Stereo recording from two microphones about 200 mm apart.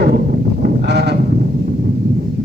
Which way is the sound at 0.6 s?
55° right (ahead or behind).